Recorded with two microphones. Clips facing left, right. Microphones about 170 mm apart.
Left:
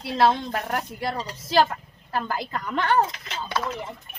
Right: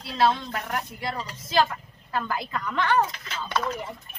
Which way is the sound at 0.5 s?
40° left (ahead or behind).